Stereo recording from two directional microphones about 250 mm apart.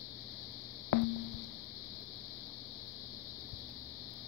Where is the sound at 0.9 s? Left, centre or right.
Right.